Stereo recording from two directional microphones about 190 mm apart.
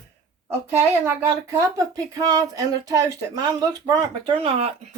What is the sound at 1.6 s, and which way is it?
Speech, 20° right (ahead or behind).